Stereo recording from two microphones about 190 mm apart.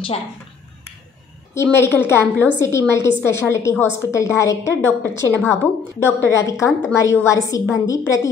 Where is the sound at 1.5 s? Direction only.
10° left (ahead or behind).